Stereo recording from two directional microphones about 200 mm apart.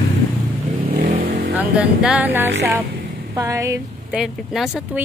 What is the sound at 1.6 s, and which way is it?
Speech, 5° right (ahead or behind).